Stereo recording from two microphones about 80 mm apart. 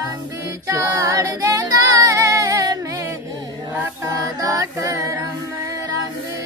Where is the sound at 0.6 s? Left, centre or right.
Right.